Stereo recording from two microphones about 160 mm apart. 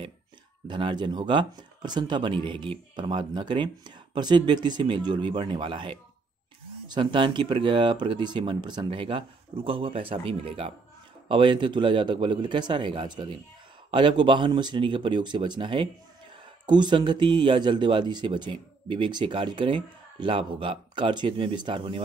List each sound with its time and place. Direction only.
0.7 s speech: 30° right (ahead or behind)